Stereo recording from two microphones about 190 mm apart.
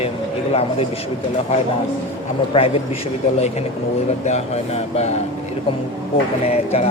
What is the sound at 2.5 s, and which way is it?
Speech, 30° left (ahead or behind).